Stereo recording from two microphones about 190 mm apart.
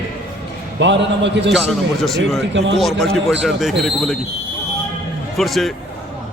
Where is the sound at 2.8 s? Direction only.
Centre (ahead or behind).